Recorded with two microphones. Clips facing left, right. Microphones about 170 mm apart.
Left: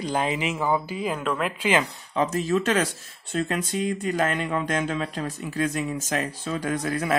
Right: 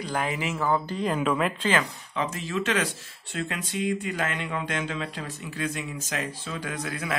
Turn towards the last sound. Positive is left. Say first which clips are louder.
# left 6 dB
turn(degrees=45)  # may be behind; listen again after turning